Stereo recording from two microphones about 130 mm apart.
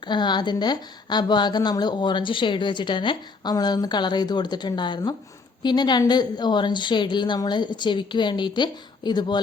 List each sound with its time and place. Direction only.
0.1 s a woman's voice: 35° left (ahead or behind)